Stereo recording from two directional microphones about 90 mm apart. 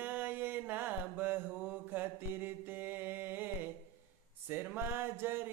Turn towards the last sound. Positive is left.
turn(degrees=-25)  # may be behind; listen again after turning